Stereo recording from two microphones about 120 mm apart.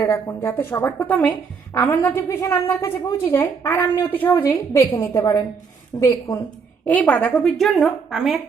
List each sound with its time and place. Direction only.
0.0 s a woman's voice: 25° left (ahead or behind)
6.8 s a woman's voice: 15° left (ahead or behind)